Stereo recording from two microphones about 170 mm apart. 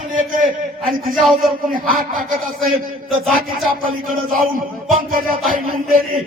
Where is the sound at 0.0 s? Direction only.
50° right (ahead or behind).